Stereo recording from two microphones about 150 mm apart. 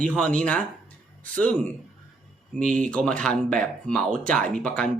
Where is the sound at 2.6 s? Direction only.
60° right (ahead or behind).